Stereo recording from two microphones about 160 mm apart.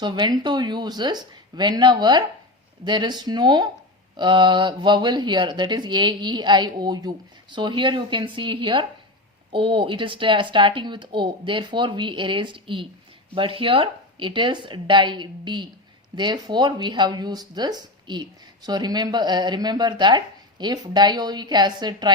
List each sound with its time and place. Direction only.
0.0 s speech: 30° right (ahead or behind)